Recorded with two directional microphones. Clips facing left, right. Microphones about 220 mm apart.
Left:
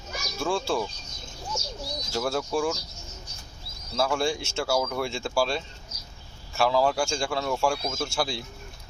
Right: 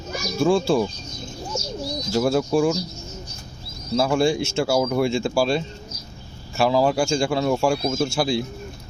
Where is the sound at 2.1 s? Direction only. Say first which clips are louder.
Right 8 dB; 15° right (ahead or behind).